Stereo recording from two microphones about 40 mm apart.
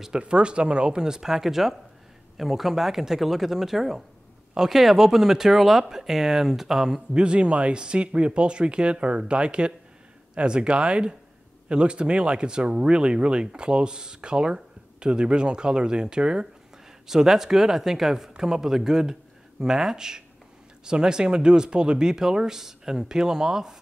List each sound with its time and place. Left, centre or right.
0.2 s speech: right; by 7.0 s centre
7.2 s speech: right
17.1 s speech: centre